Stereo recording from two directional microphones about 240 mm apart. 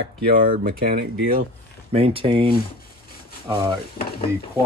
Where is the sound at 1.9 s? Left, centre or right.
Right.